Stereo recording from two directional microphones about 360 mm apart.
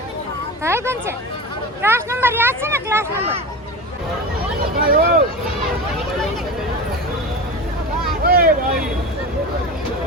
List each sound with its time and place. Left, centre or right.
0.6 s speech: centre
4.8 s speech: right
8.2 s vehicle: right